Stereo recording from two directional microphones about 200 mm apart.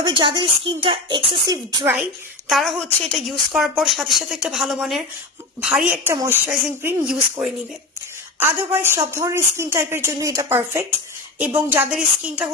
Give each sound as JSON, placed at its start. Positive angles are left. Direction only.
{"t": 0.0, "sound": "speech", "side_deg": -25}
{"t": 2.0, "sound": "a woman's voice", "side_deg": 0}